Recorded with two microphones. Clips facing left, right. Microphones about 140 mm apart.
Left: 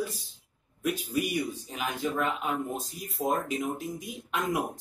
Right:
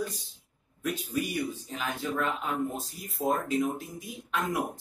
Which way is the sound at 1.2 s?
15° left (ahead or behind).